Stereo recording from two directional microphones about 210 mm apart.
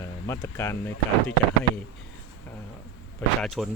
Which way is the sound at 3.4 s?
Centre (ahead or behind).